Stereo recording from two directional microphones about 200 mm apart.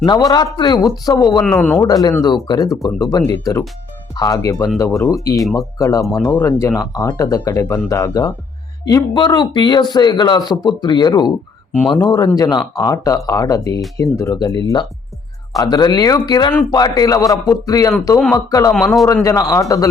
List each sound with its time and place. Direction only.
0.0 s speech: 20° left (ahead or behind)
1.4 s speech: 5° left (ahead or behind)
18.7 s speech: centre (ahead or behind)
19.0 s speech: 15° left (ahead or behind)